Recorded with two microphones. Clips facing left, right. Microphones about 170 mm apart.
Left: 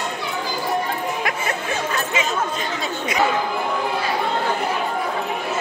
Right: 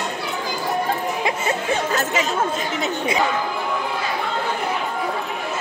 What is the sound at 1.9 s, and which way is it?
Speech, 40° right (ahead or behind).